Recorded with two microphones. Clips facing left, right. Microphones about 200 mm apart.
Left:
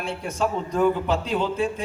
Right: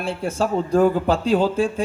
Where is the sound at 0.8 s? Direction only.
40° right (ahead or behind).